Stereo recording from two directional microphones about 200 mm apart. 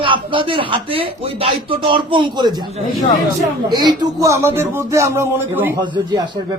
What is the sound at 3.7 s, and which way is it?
Speech, 20° right (ahead or behind).